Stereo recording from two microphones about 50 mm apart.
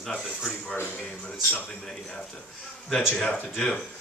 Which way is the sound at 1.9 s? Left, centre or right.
Centre.